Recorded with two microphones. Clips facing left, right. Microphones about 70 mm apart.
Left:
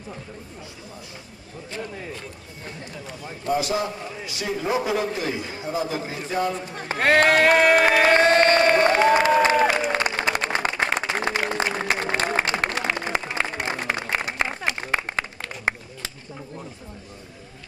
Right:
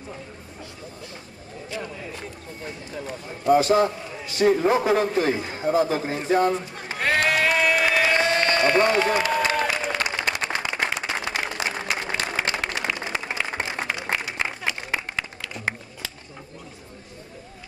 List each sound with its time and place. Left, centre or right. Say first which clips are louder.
3.5 s a man's voice: right 6 dB; right
6.7 s a sound: left 5 dB; left
10.6 s applause: left 3 dB; left
14.4 s music: left 2 dB; left